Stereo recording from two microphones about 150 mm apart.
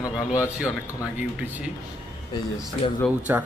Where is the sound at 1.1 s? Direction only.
10° right (ahead or behind).